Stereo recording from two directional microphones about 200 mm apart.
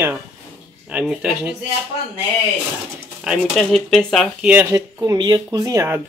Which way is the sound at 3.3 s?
Centre (ahead or behind).